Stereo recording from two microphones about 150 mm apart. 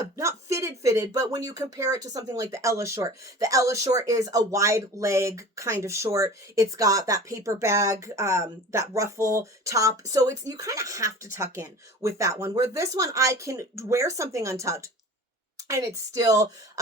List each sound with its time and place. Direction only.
0.2 s speech: 20° right (ahead or behind)